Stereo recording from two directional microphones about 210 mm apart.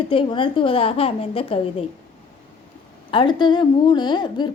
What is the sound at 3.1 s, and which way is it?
A woman's voice, 20° left (ahead or behind).